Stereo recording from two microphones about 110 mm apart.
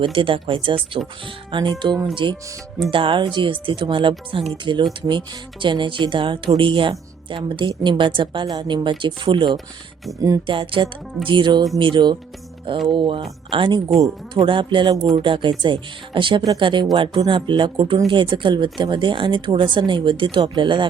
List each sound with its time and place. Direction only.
0.0 s speech: 50° right (ahead or behind)